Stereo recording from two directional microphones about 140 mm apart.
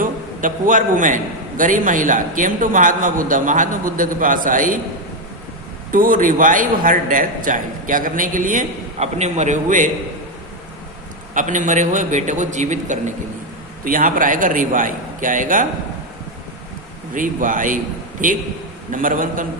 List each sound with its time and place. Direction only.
0.0 s a man's voice: 75° right (ahead or behind)
5.9 s a man's voice: 75° right (ahead or behind)
9.0 s a man's voice: 55° right (ahead or behind)
11.3 s a man's voice: 65° right (ahead or behind)
13.8 s a man's voice: 75° right (ahead or behind)
17.2 s a man's voice: 70° right (ahead or behind)